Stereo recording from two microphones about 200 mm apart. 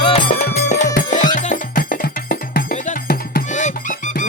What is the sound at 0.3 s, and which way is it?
Music, 40° left (ahead or behind).